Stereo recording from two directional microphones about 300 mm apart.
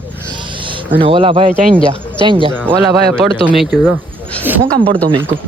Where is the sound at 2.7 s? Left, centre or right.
Centre.